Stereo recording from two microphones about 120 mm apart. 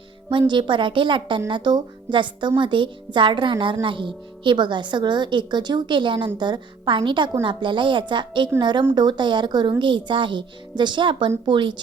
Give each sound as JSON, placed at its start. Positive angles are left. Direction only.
{"t": 0.3, "sound": "a woman's voice", "side_deg": -40}